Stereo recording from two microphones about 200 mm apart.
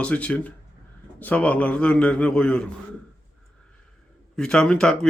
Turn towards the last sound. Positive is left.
turn(degrees=5)  # may be behind; listen again after turning